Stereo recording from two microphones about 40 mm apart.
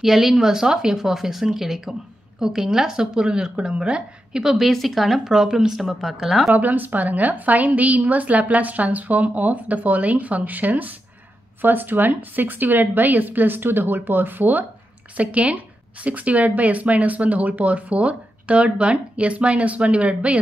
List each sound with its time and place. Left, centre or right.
0.0 s a woman's voice: centre; by 4.4 s right
4.4 s speech: centre
6.5 s a woman's voice: right
11.6 s a woman's voice: right
15.1 s speech: right